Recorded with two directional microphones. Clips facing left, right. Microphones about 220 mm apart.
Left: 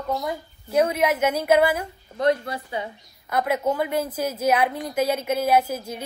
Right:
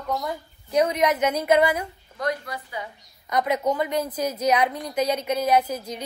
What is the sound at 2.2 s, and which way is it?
Speech, 25° left (ahead or behind).